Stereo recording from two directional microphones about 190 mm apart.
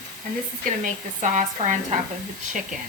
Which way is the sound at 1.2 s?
40° right (ahead or behind).